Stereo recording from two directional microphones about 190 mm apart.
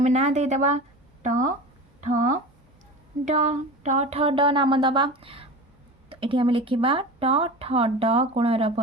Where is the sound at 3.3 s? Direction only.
40° right (ahead or behind).